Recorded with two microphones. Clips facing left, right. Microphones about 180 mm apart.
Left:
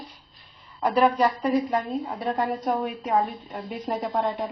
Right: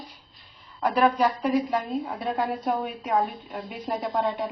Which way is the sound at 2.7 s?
10° left (ahead or behind).